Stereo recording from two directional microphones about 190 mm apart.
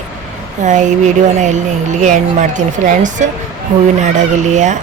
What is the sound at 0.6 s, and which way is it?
Speech, 40° right (ahead or behind).